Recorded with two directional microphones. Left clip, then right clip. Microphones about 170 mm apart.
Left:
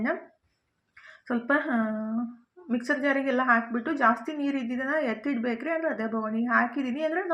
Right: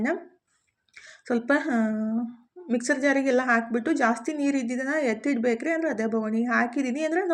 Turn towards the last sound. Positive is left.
turn(degrees=-30)  # may be behind; listen again after turning